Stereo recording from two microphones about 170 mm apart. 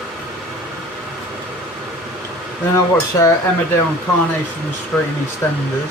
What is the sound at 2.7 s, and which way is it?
Speech, 20° left (ahead or behind).